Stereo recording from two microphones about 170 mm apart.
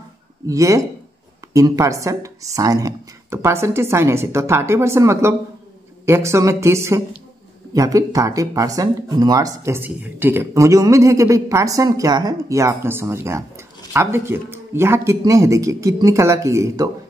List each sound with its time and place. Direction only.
0.5 s speech: 20° right (ahead or behind)